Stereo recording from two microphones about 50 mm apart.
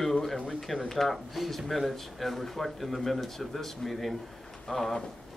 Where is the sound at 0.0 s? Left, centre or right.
Centre.